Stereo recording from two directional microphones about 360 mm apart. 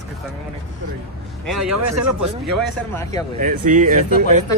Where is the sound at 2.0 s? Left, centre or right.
Right.